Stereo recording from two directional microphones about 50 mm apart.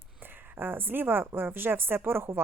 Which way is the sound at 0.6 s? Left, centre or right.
Right.